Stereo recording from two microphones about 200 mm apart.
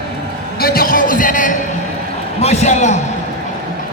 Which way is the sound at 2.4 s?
35° left (ahead or behind).